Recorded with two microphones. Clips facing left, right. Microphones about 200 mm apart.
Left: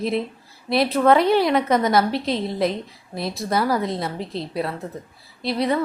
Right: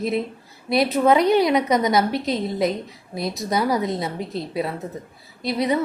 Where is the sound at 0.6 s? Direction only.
Centre (ahead or behind).